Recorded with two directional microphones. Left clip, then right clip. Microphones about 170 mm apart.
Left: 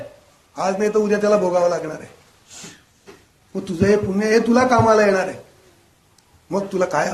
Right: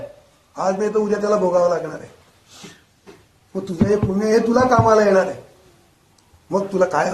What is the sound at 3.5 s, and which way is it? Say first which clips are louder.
A man's voice: left 2 dB; 65° left (ahead or behind).